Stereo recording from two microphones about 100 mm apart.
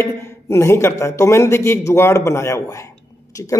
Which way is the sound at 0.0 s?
25° left (ahead or behind).